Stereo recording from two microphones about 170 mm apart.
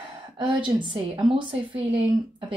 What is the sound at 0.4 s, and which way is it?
A woman's voice, 30° right (ahead or behind).